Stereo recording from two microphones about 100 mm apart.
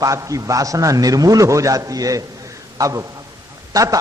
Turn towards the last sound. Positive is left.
turn(degrees=-35)  # may be behind; listen again after turning